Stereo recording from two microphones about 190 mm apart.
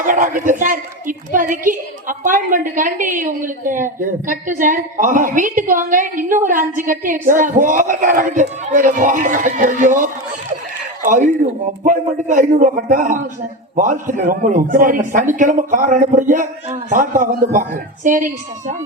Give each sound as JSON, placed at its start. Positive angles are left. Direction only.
{"t": 0.0, "sound": "a woman's voice", "side_deg": -40}